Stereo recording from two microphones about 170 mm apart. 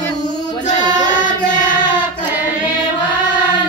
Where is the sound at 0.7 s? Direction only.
45° left (ahead or behind).